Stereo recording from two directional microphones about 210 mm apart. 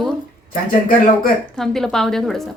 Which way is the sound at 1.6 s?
Centre (ahead or behind).